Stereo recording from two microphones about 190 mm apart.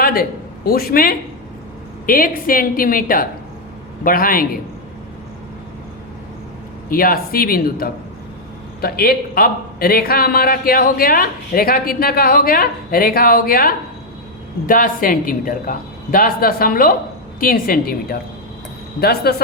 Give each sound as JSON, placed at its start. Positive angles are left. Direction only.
{"t": 0.0, "sound": "a man's voice", "side_deg": 50}
{"t": 6.9, "sound": "speech", "side_deg": 50}